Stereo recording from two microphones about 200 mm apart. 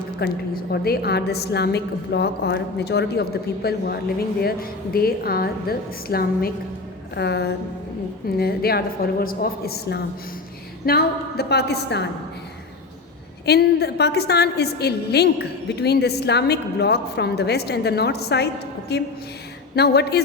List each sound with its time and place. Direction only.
0.2 s a woman's voice: 50° left (ahead or behind)
13.4 s a woman's voice: 55° left (ahead or behind)